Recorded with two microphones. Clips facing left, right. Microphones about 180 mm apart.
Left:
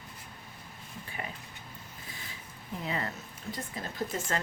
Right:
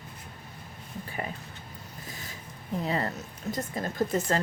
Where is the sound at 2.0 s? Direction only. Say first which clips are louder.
Right 4 dB; 40° right (ahead or behind).